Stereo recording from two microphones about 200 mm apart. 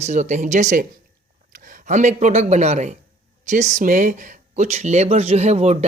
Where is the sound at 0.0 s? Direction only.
35° right (ahead or behind).